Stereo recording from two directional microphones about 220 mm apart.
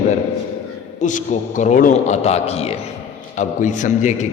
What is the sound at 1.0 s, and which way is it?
A man's voice, 35° left (ahead or behind).